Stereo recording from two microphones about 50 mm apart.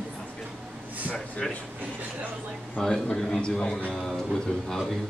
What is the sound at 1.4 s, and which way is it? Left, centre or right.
Speech, centre.